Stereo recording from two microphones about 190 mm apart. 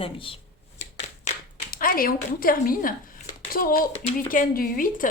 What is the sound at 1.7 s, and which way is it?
A woman's voice, 50° left (ahead or behind).